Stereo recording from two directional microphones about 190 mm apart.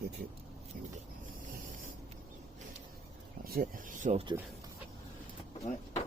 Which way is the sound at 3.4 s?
50° right (ahead or behind).